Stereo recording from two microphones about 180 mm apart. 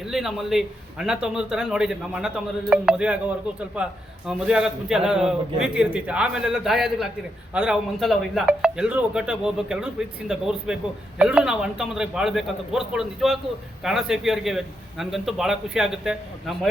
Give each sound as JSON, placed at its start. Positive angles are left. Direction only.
{"t": 0.0, "sound": "a man's voice", "side_deg": -5}